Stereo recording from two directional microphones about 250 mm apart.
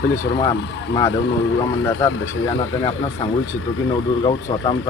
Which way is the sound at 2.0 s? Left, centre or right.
Centre.